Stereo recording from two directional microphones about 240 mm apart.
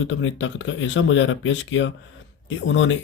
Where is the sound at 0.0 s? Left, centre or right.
Left.